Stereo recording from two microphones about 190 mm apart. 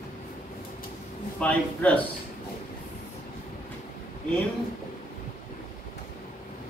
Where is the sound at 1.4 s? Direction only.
5° left (ahead or behind).